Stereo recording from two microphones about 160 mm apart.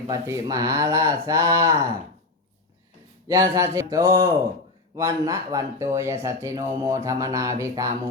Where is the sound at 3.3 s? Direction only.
20° right (ahead or behind).